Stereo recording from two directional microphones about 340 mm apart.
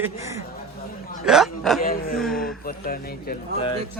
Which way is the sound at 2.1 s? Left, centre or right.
Centre.